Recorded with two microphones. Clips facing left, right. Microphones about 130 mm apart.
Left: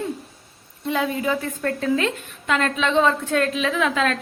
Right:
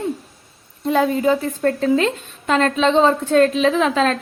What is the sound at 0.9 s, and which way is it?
A woman's voice, 40° right (ahead or behind).